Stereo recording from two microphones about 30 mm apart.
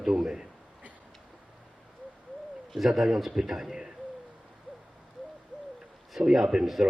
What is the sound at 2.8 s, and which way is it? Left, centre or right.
Speech, centre.